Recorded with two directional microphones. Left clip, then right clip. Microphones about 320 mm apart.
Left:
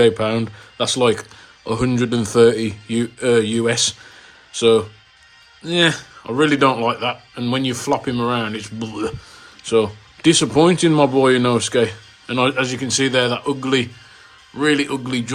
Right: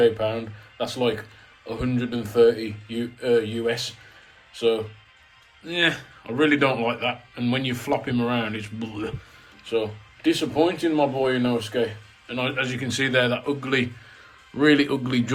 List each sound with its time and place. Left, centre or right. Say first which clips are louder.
0.0 s a man's voice: left 5 dB; left; by 15.2 s centre